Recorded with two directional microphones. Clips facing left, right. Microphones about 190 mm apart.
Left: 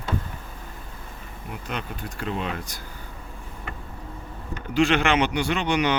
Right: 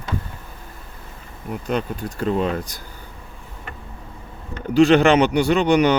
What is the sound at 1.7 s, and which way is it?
Speech, 35° right (ahead or behind).